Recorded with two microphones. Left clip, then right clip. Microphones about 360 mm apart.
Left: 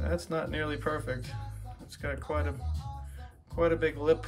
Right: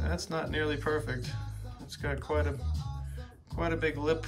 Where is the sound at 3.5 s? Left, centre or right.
Centre.